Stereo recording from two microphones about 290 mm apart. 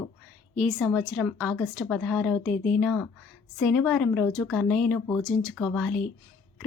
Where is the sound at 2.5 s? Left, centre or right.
Left.